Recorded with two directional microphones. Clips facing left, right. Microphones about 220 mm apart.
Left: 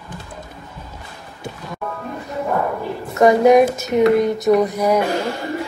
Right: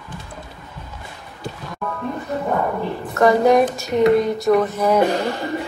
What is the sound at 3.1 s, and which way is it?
A woman's voice, 20° left (ahead or behind).